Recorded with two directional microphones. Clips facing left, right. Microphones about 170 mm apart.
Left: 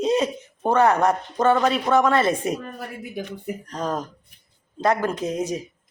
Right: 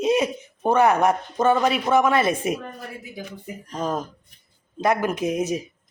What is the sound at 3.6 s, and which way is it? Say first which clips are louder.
Speech: right 2 dB; 5° right (ahead or behind).